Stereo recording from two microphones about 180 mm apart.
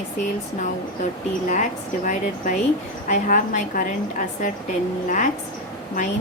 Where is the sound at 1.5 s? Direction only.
45° left (ahead or behind).